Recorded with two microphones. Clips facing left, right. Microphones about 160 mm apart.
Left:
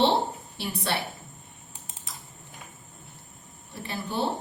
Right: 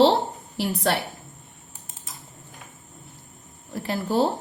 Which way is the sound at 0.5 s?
90° right.